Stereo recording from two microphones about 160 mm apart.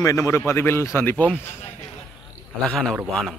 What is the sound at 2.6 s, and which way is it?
Speech, 5° left (ahead or behind).